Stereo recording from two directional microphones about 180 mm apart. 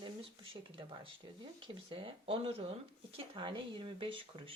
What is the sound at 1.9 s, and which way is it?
Speech, 30° right (ahead or behind).